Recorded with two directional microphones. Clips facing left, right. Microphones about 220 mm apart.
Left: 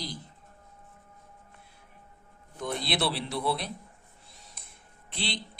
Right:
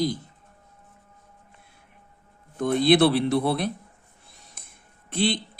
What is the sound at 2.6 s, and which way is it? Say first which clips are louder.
A man's voice: right 12 dB; 50° right (ahead or behind).